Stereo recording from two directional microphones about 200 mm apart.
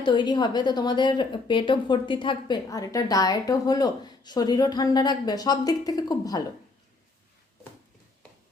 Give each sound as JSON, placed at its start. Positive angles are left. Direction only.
{"t": 0.0, "sound": "a woman's voice", "side_deg": 25}